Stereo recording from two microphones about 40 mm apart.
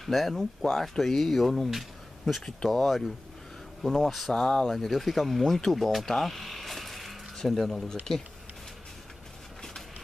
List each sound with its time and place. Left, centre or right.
0.0 s speech: centre
6.0 s a sound: centre
7.8 s speech: centre